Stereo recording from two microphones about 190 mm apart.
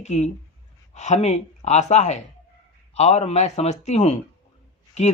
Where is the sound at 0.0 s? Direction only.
35° left (ahead or behind).